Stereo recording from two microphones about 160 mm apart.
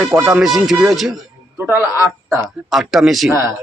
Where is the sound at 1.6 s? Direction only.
15° right (ahead or behind).